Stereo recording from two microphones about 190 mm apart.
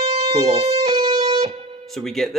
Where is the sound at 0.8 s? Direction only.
35° right (ahead or behind).